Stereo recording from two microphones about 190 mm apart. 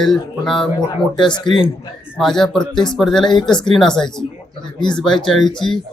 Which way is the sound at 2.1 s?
Centre (ahead or behind).